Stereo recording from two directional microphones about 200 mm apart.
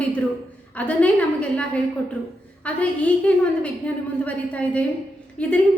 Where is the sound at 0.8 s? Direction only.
5° left (ahead or behind).